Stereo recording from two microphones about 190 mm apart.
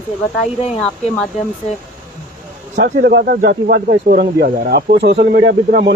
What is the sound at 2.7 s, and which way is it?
Speech, 60° right (ahead or behind).